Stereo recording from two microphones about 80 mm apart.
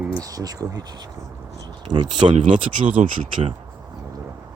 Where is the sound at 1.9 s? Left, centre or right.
Right.